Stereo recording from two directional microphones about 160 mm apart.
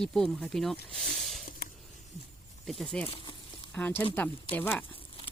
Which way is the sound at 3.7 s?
10° left (ahead or behind).